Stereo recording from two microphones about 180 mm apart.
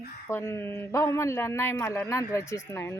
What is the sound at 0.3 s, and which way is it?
A man's voice, 15° left (ahead or behind).